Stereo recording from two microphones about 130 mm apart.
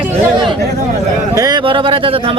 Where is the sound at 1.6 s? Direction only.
40° right (ahead or behind).